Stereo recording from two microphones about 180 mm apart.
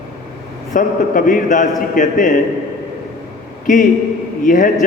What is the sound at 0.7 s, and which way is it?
A man's voice, 45° left (ahead or behind).